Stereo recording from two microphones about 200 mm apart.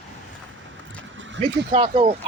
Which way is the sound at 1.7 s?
30° right (ahead or behind).